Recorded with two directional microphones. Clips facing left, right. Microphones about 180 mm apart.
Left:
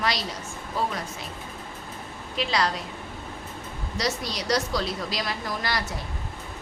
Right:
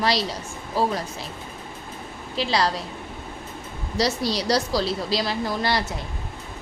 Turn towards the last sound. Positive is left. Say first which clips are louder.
# right 5 dB
turn(degrees=-30)  # may be behind; listen again after turning